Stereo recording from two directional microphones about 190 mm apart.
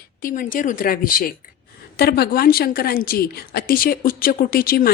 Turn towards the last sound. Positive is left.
turn(degrees=50)  # may be behind; listen again after turning